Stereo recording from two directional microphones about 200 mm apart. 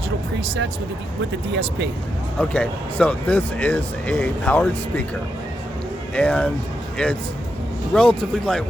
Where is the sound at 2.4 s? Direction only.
5° left (ahead or behind).